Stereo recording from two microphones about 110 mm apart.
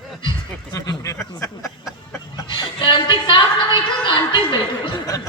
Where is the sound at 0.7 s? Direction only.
35° left (ahead or behind).